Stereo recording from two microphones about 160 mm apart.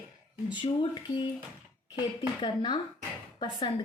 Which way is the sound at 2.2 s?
25° left (ahead or behind).